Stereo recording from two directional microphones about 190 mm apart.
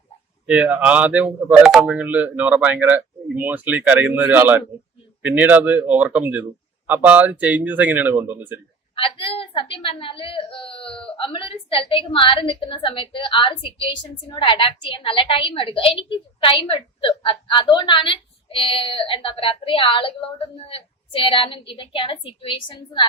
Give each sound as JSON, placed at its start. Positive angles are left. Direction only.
{"t": 0.4, "sound": "speech", "side_deg": -5}
{"t": 9.0, "sound": "a woman's voice", "side_deg": 30}